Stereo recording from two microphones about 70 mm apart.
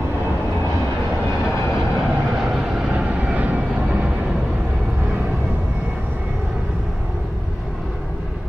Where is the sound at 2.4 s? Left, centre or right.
Centre.